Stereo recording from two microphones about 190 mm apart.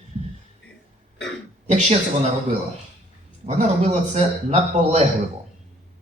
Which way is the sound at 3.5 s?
35° right (ahead or behind).